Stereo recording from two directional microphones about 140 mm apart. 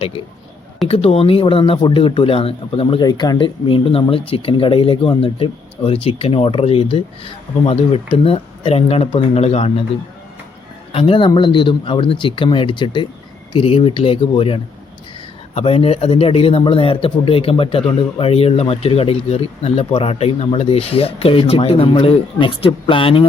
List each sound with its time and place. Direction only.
0.9 s speech: 45° left (ahead or behind)
10.9 s speech: 40° left (ahead or behind)